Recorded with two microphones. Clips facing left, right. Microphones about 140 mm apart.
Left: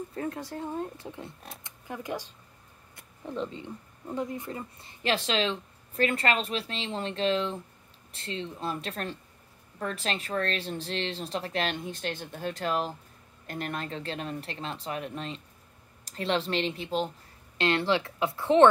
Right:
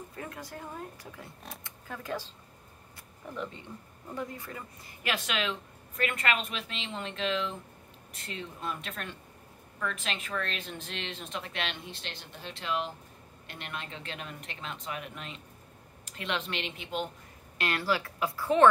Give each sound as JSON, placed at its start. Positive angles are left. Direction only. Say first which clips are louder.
{"t": 0.1, "sound": "speech", "louder": "left 7 dB", "side_deg": 30}
{"t": 3.3, "sound": "speech", "louder": "left 4 dB", "side_deg": 20}